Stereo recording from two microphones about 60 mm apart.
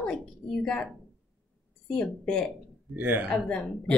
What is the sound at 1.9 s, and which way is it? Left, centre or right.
Speech, centre.